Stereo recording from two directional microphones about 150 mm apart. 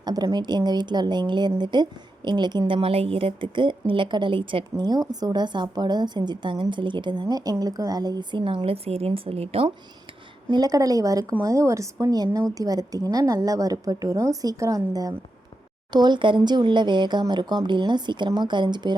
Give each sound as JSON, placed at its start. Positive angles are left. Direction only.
{"t": 0.0, "sound": "a woman's voice", "side_deg": -25}
{"t": 10.5, "sound": "a woman's voice", "side_deg": -25}